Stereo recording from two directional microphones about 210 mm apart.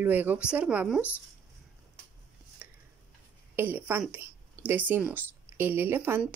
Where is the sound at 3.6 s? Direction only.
10° right (ahead or behind).